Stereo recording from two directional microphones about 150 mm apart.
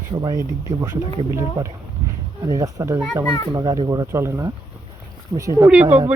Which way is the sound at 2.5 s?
25° right (ahead or behind).